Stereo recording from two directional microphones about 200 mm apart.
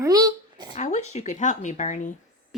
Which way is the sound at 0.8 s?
35° left (ahead or behind).